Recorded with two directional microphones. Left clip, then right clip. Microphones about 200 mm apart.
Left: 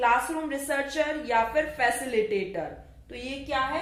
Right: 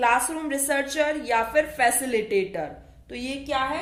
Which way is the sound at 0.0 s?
50° right (ahead or behind).